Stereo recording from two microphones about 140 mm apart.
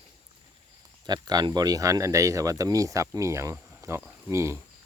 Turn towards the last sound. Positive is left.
turn(degrees=-20)  # may be behind; listen again after turning